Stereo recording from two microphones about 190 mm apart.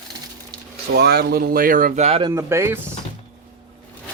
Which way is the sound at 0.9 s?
60° right (ahead or behind).